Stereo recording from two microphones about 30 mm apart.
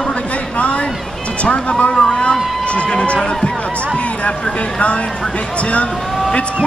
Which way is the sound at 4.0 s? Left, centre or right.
Left.